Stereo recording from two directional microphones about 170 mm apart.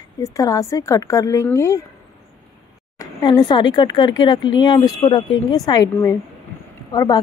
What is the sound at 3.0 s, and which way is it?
Speech, 25° left (ahead or behind).